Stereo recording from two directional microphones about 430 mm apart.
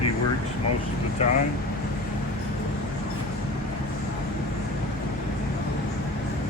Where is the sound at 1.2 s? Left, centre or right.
Centre.